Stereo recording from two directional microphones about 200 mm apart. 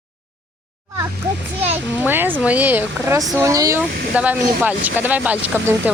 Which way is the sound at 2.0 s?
10° right (ahead or behind).